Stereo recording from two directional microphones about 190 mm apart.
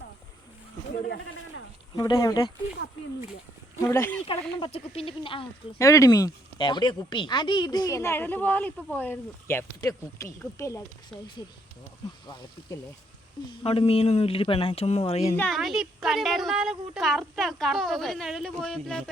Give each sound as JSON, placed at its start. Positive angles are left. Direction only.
{"t": 1.0, "sound": "speech", "side_deg": 60}
{"t": 2.0, "sound": "speech", "side_deg": 20}
{"t": 3.8, "sound": "speech", "side_deg": 10}
{"t": 4.3, "sound": "speech", "side_deg": 30}
{"t": 5.8, "sound": "speech", "side_deg": 15}
{"t": 13.5, "sound": "speech", "side_deg": 30}
{"t": 15.4, "sound": "a woman's voice", "side_deg": 0}